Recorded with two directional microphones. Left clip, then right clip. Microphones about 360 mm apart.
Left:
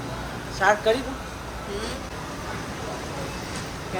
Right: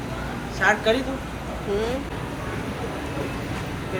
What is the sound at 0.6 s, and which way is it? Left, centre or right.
Speech, centre.